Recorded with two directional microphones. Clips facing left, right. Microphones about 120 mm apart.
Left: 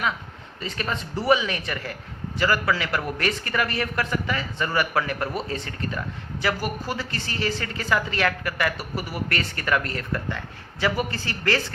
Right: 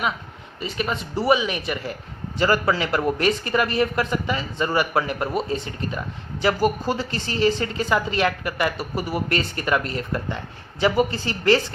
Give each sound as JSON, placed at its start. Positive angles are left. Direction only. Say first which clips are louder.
{"t": 0.6, "sound": "a woman's voice", "louder": "right 3 dB", "side_deg": -15}